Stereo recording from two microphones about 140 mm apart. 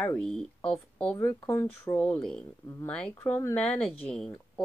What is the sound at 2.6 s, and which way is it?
Speech, 20° left (ahead or behind).